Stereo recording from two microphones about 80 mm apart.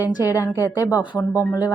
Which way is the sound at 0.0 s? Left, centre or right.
Left.